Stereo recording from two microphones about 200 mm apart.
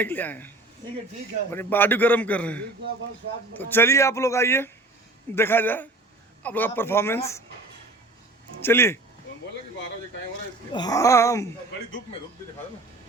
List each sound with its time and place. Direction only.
0.0 s a man's voice: 10° left (ahead or behind)
8.6 s a man's voice: 10° left (ahead or behind)
10.7 s a man's voice: 20° left (ahead or behind)